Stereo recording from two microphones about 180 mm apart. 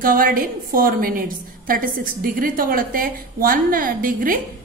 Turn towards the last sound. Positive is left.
turn(degrees=-50)  # may be behind; listen again after turning